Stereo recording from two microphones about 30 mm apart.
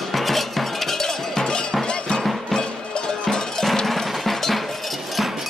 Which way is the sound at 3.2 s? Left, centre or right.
Centre.